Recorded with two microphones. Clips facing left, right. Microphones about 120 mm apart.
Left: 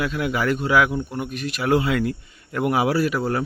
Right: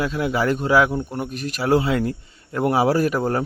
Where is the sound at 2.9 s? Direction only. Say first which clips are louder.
Right 2 dB; 45° right (ahead or behind).